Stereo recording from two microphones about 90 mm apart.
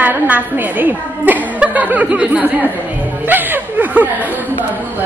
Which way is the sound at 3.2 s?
20° right (ahead or behind).